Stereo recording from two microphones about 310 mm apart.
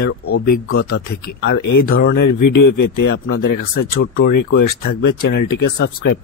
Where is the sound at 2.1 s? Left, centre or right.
Left.